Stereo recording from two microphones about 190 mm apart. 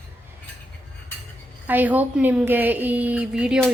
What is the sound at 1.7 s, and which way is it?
A woman's voice, 10° right (ahead or behind).